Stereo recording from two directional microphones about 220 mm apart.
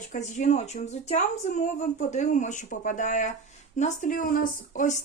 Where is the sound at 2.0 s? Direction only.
35° left (ahead or behind).